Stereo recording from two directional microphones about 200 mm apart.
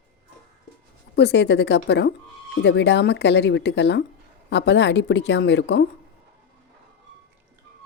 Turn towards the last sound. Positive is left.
turn(degrees=55)  # may be behind; listen again after turning